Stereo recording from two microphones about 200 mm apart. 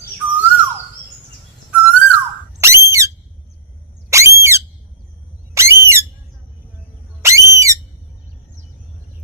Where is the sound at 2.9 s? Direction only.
15° right (ahead or behind).